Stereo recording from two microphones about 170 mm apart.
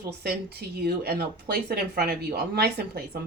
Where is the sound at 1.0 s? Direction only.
70° right (ahead or behind).